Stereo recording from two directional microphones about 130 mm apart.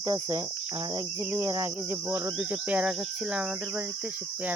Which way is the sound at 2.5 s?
10° right (ahead or behind).